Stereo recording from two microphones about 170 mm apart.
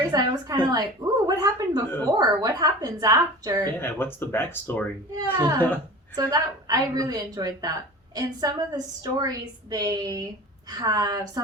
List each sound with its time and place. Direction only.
0.1 s a woman's voice: 25° right (ahead or behind)
3.8 s speech: 15° left (ahead or behind)
5.1 s a woman's voice: 20° right (ahead or behind)